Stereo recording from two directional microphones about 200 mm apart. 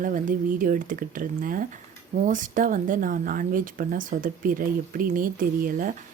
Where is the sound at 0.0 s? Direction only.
40° right (ahead or behind).